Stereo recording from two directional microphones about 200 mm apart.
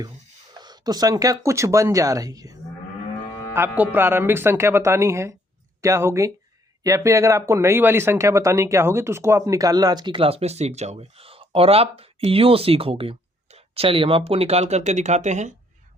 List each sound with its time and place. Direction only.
0.6 s speech: 20° right (ahead or behind); by 15.5 s 35° right (ahead or behind)